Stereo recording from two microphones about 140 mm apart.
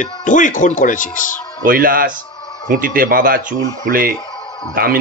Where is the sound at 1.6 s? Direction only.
90° right.